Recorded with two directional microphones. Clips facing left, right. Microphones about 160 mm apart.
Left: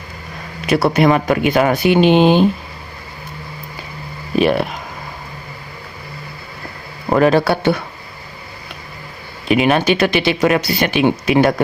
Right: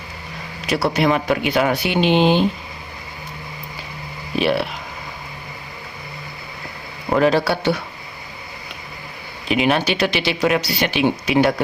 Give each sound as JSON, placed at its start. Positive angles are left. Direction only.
{"t": 0.7, "sound": "speech", "side_deg": 55}
{"t": 4.4, "sound": "speech", "side_deg": 45}
{"t": 7.1, "sound": "speech", "side_deg": 50}
{"t": 9.5, "sound": "speech", "side_deg": 50}